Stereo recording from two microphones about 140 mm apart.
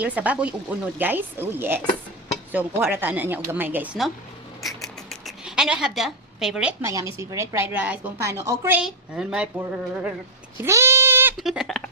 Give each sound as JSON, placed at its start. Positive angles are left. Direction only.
{"t": 0.0, "sound": "speech", "side_deg": -10}
{"t": 4.6, "sound": "a sound", "side_deg": 0}
{"t": 6.8, "sound": "a woman's voice", "side_deg": -20}
{"t": 8.8, "sound": "a woman's voice", "side_deg": -5}
{"t": 10.6, "sound": "bleat", "side_deg": -20}
{"t": 11.3, "sound": "a woman's voice", "side_deg": 0}